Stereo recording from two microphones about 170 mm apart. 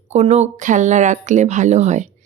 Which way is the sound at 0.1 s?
40° right (ahead or behind).